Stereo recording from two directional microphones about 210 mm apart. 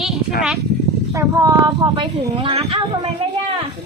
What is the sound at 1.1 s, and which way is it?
Speech, 15° right (ahead or behind).